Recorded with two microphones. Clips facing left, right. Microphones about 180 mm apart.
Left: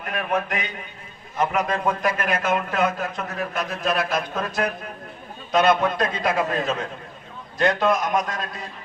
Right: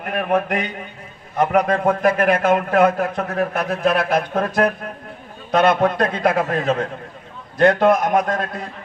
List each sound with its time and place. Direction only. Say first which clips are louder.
0.0 s a man's voice: right 5 dB; 55° right (ahead or behind)